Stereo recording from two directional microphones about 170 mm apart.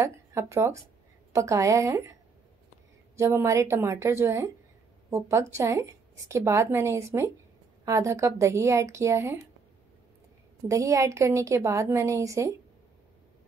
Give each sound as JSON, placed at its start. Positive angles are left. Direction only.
{"t": 0.0, "sound": "a woman's voice", "side_deg": -15}
{"t": 3.2, "sound": "a woman's voice", "side_deg": -15}
{"t": 10.7, "sound": "a woman's voice", "side_deg": -20}